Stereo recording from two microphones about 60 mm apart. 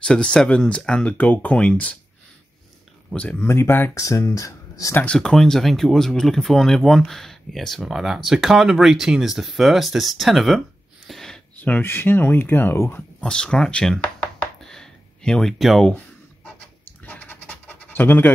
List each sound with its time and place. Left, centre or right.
0.0 s speech: centre
3.3 s speech: left
3.9 s speech: left
5.0 s speech: centre
11.1 s a sound: centre
11.5 s a sound: left
11.8 s speech: left
13.2 s speech: centre
14.0 s chopping: left
14.6 s a sound: centre
15.6 s speech: centre
16.8 s scratch: left